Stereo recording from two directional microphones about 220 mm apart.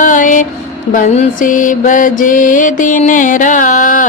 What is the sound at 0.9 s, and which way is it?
Mantra, 35° left (ahead or behind).